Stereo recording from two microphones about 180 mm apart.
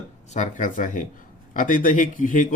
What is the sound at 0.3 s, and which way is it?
Speech, 40° left (ahead or behind).